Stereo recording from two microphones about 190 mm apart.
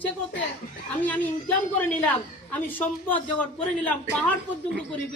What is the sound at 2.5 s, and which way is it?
A woman's voice, 10° left (ahead or behind).